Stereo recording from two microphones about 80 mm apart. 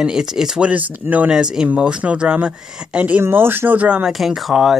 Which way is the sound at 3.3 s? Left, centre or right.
Right.